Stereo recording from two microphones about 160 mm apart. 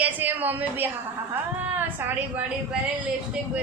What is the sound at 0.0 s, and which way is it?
Speech, 10° right (ahead or behind).